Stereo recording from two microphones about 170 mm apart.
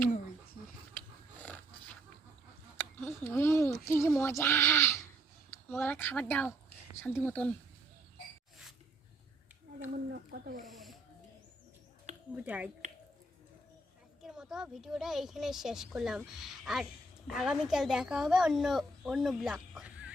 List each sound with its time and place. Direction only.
0.9 s a sound: 10° left (ahead or behind)
2.7 s speech: 15° left (ahead or behind)
10.1 s speech: 65° right (ahead or behind)
10.7 s speech: centre (ahead or behind)
12.3 s speech: 10° right (ahead or behind)
14.2 s a woman's voice: 5° right (ahead or behind)